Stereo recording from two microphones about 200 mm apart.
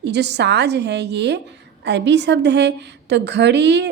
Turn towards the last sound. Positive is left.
turn(degrees=-60)  # may be behind; listen again after turning